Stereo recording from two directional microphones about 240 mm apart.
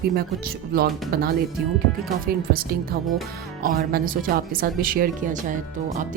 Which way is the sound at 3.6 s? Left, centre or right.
Right.